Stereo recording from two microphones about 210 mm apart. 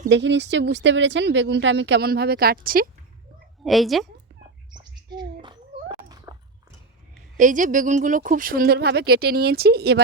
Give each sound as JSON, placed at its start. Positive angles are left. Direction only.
{"t": 0.1, "sound": "speech", "side_deg": -55}
{"t": 3.6, "sound": "a woman's voice", "side_deg": 0}
{"t": 4.7, "sound": "a sound", "side_deg": -20}
{"t": 7.3, "sound": "speech", "side_deg": -40}